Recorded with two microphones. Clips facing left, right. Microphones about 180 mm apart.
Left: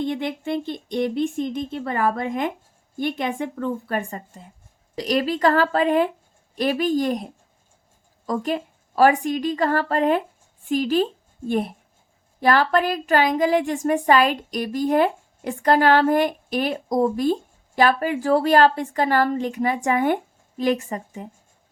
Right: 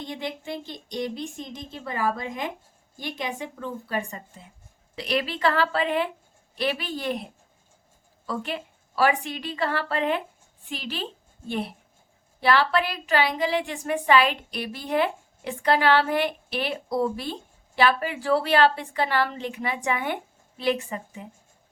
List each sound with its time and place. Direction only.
0.0 s speech: 55° left (ahead or behind)
4.9 s a woman's voice: 40° left (ahead or behind)
8.3 s a woman's voice: 40° left (ahead or behind)